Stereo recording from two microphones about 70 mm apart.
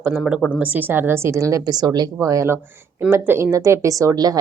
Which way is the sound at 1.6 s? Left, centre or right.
Right.